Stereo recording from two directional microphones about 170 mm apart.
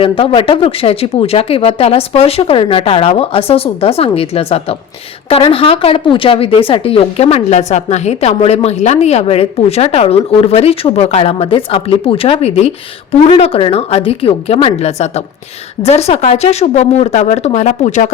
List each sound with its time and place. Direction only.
0.0 s a woman's voice: 30° left (ahead or behind)